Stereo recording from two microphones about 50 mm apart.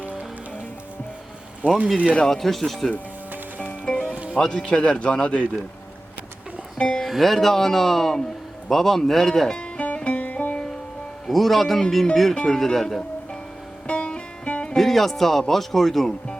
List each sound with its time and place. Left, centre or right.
1.6 s speech: right
2.2 s speech: centre
3.8 s music: left
4.1 s music: right
4.4 s a man's voice: centre
6.7 s speech: centre
7.0 s speech: centre
9.7 s music: left
11.3 s speech: centre
13.8 s music: centre
14.8 s speech: centre